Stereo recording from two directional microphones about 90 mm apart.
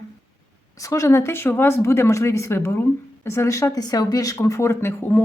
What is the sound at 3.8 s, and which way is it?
Speech, 45° left (ahead or behind).